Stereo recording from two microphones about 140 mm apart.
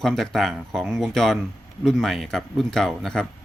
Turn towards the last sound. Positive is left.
turn(degrees=5)  # may be behind; listen again after turning